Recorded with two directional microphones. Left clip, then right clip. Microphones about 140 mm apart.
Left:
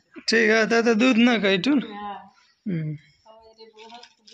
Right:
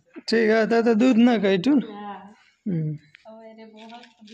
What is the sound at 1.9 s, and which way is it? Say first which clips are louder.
Speech: left 2 dB; centre (ahead or behind).